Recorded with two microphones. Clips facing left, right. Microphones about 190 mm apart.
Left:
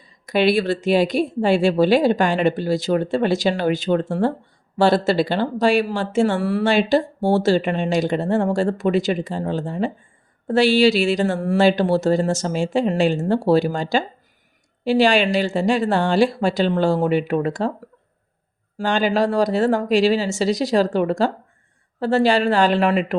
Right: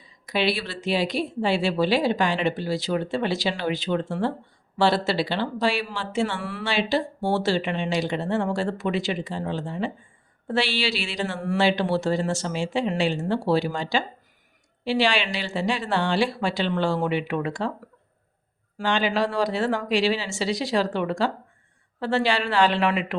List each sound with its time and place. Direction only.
0.3 s speech: 50° left (ahead or behind)
18.8 s speech: 45° left (ahead or behind)